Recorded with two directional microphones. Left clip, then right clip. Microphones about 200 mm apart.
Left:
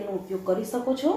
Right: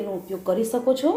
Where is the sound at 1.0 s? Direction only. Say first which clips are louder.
Right 3 dB; 40° right (ahead or behind).